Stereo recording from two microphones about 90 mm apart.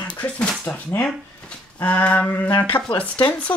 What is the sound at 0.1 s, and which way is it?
Speech, 15° left (ahead or behind).